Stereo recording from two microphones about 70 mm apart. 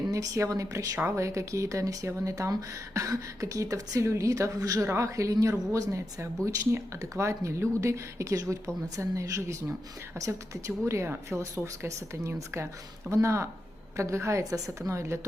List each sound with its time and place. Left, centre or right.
0.1 s a woman's voice: right